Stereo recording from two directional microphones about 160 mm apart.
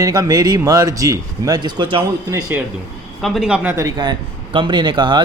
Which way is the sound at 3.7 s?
20° right (ahead or behind).